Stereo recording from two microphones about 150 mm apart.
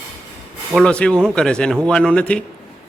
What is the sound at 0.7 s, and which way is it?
A man's voice, 5° left (ahead or behind).